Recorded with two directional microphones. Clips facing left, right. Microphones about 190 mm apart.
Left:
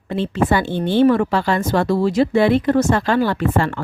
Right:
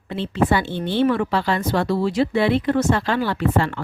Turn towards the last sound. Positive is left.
turn(degrees=50)  # may be behind; listen again after turning